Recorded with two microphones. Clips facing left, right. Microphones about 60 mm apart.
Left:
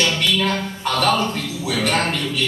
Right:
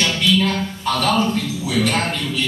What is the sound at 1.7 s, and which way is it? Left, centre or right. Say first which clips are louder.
Speech: right 1 dB; left.